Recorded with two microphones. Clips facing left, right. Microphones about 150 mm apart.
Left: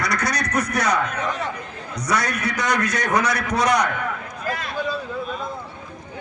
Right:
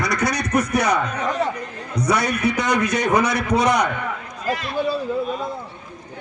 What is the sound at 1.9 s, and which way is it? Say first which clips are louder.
Speech: right 4 dB; 55° right (ahead or behind).